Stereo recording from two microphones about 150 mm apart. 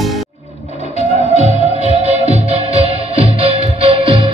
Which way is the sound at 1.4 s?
45° right (ahead or behind).